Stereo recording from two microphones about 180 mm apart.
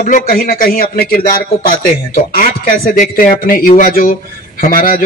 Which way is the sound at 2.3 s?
50° left (ahead or behind).